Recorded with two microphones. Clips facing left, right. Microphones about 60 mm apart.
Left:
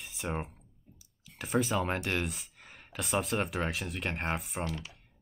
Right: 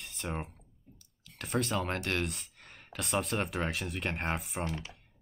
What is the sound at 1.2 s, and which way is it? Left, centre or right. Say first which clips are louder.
Speech: left 3 dB; centre.